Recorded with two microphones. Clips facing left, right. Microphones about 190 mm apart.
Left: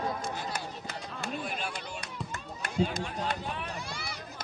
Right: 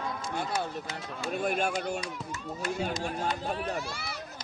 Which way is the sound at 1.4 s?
50° right (ahead or behind).